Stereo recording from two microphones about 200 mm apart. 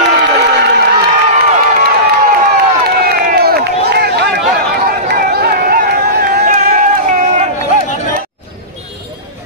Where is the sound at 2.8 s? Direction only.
50° right (ahead or behind).